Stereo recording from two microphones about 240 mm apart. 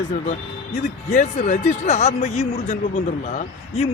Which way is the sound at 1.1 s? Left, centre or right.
Left.